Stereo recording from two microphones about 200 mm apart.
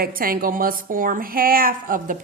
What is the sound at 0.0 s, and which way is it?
A woman's voice, 45° right (ahead or behind).